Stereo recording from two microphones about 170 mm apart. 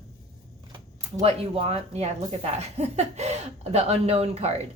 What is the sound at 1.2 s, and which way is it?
Speech, 35° right (ahead or behind).